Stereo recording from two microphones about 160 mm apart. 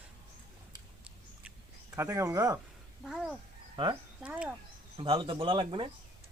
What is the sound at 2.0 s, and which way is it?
Speech, 20° right (ahead or behind).